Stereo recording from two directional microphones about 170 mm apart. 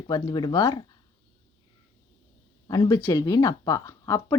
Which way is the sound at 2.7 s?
20° left (ahead or behind).